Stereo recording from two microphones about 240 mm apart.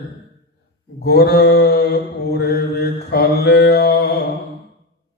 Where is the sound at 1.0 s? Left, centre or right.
Left.